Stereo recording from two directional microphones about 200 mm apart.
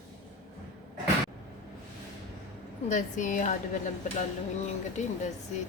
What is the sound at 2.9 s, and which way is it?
Speech, 40° left (ahead or behind).